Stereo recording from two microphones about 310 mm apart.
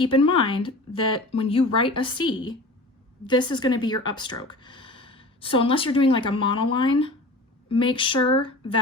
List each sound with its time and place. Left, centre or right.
0.0 s speech: centre